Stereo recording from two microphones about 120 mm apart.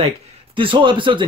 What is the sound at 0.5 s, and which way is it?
Speech, 45° right (ahead or behind).